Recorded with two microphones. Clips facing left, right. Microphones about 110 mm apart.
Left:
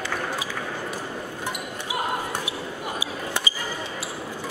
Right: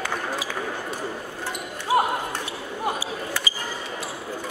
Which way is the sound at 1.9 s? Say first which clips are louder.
Right 9 dB; 40° right (ahead or behind).